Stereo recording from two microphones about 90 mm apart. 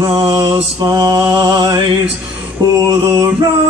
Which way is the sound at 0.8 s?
45° right (ahead or behind).